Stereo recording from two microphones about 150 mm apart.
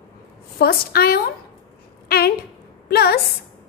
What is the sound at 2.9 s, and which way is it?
Speech, 90° left.